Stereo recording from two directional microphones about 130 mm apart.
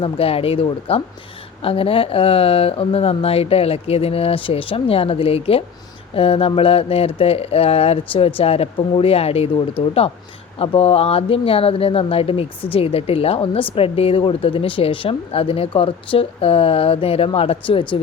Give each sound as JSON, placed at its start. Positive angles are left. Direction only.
{"t": 0.0, "sound": "speech", "side_deg": 50}